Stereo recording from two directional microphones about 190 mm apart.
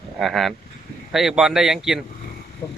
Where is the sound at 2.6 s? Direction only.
25° left (ahead or behind).